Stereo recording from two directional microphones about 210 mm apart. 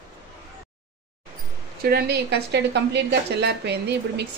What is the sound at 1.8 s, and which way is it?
A woman's voice, 50° right (ahead or behind).